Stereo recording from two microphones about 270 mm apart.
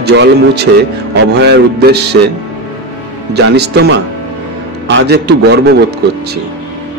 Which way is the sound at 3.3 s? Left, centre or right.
Right.